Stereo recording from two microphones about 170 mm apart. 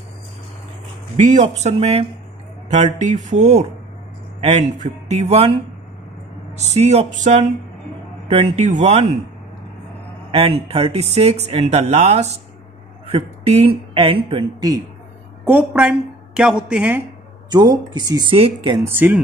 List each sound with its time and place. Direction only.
1.2 s speech: 45° right (ahead or behind)
10.3 s speech: 35° right (ahead or behind)
15.4 s a woman's voice: 10° right (ahead or behind)
17.5 s speech: 25° right (ahead or behind)
18.9 s a woman's voice: 10° right (ahead or behind)